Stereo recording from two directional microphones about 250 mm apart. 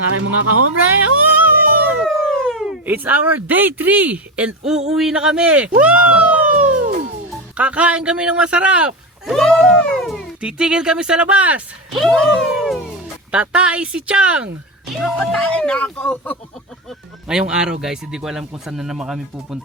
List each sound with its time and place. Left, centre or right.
0.1 s speech: right
1.2 s music: centre
2.2 s speech: centre